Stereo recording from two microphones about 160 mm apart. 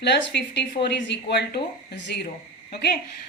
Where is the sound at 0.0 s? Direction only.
90° left.